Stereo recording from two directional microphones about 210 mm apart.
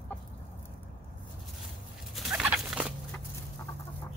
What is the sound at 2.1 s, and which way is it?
Rodents, centre (ahead or behind).